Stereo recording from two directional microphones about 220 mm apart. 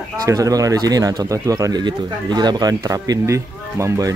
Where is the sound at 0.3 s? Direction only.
15° right (ahead or behind).